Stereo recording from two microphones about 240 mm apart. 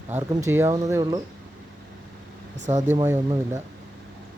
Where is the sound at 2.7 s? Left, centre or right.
Right.